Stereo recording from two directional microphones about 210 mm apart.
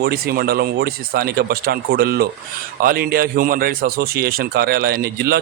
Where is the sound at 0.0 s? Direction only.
45° right (ahead or behind).